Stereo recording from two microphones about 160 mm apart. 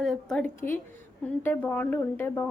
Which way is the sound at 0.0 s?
Centre (ahead or behind).